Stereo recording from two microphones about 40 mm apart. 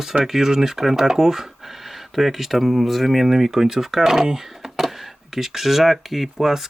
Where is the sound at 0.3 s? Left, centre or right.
Centre.